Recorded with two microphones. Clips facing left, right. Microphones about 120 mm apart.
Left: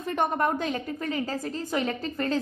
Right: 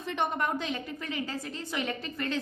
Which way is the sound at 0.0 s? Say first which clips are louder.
Left 5 dB; 45° left (ahead or behind).